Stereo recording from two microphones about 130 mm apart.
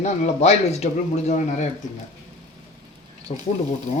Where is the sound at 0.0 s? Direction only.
55° left (ahead or behind).